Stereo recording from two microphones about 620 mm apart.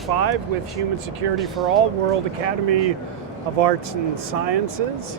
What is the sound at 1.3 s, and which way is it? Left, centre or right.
Speech, centre.